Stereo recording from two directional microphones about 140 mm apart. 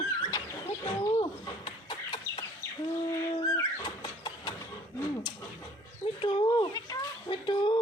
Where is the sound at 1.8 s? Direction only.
35° left (ahead or behind).